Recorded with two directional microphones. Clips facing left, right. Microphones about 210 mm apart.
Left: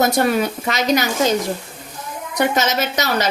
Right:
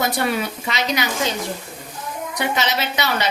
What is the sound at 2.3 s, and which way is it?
Speech, 45° left (ahead or behind).